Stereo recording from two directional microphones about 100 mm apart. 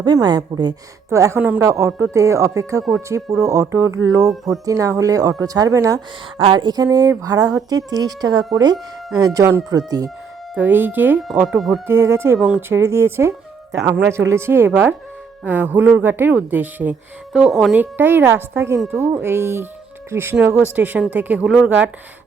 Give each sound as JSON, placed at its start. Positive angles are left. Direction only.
{"t": 0.0, "sound": "speech", "side_deg": -45}
{"t": 1.1, "sound": "speech", "side_deg": -30}
{"t": 1.4, "sound": "speech", "side_deg": -20}
{"t": 1.6, "sound": "speech", "side_deg": -30}
{"t": 6.4, "sound": "speech", "side_deg": -50}
{"t": 6.8, "sound": "speech", "side_deg": -30}
{"t": 10.6, "sound": "speech", "side_deg": -20}
{"t": 11.4, "sound": "speech", "side_deg": 0}
{"t": 11.9, "sound": "speech", "side_deg": -25}
{"t": 12.4, "sound": "speech", "side_deg": -10}
{"t": 12.6, "sound": "speech", "side_deg": -25}
{"t": 17.3, "sound": "speech", "side_deg": -5}
{"t": 17.7, "sound": "speech", "side_deg": -20}